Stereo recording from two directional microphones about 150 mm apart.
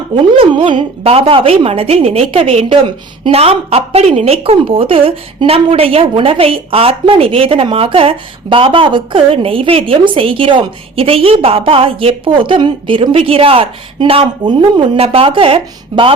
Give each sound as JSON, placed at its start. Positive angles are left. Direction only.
{"t": 0.3, "sound": "a woman's voice", "side_deg": -35}